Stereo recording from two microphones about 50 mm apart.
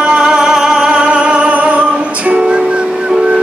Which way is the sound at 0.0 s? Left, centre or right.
Centre.